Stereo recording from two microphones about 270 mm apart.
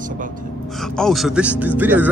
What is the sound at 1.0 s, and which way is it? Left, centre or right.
Speech, centre.